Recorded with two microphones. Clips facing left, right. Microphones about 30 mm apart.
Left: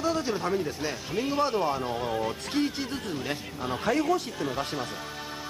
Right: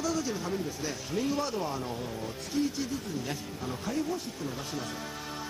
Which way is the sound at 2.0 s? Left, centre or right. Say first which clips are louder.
Left 7 dB; left.